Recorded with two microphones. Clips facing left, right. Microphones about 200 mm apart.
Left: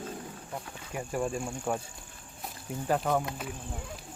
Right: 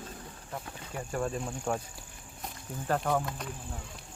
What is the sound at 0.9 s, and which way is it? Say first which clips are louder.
Speech: left 1 dB; 10° left (ahead or behind).